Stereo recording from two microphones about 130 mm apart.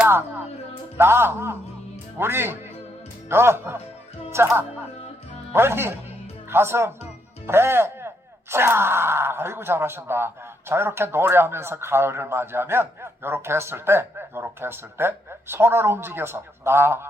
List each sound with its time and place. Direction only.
0.1 s music: 20° right (ahead or behind)
0.9 s speech: 20° right (ahead or behind)